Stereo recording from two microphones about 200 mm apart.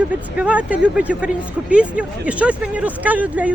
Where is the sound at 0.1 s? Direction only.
5° right (ahead or behind).